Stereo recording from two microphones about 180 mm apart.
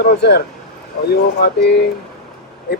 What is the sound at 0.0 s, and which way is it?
A man's voice, 65° left (ahead or behind).